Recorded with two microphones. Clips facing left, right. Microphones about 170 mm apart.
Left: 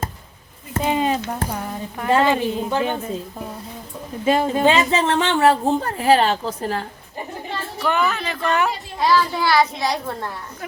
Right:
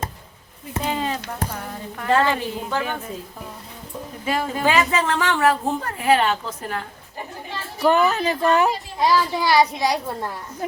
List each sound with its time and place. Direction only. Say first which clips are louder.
0.8 s a sound: left 5 dB; 20° left (ahead or behind)
2.0 s speech: left 2 dB; 20° left (ahead or behind)
4.3 s speech: left 5 dB; 25° left (ahead or behind)
7.8 s speech: right 4 dB; 40° right (ahead or behind)
9.0 s a child's voice: left 2 dB; 15° right (ahead or behind)